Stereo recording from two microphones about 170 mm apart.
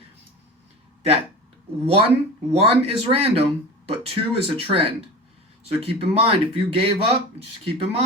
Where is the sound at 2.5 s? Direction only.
35° right (ahead or behind).